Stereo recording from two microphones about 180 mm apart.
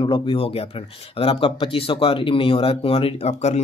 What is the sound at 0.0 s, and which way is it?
Speech, 30° left (ahead or behind).